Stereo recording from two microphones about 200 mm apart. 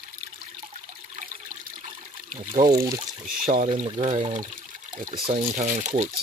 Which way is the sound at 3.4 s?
40° right (ahead or behind).